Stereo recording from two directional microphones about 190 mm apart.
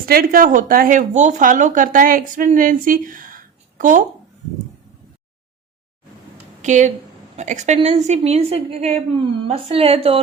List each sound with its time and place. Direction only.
0.0 s speech: 50° right (ahead or behind)
6.6 s a woman's voice: 40° right (ahead or behind)